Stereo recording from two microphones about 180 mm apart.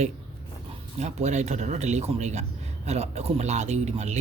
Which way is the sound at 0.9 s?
40° right (ahead or behind).